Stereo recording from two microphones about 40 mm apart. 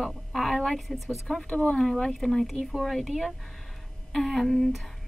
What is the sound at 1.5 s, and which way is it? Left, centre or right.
Speech, left.